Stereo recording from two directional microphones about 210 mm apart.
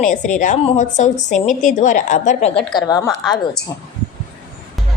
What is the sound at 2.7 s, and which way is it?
Speech, 20° left (ahead or behind).